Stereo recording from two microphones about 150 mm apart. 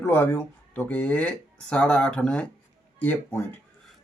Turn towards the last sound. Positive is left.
turn(degrees=10)  # may be behind; listen again after turning